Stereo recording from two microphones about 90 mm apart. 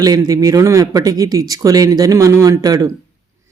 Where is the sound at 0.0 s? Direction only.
45° right (ahead or behind).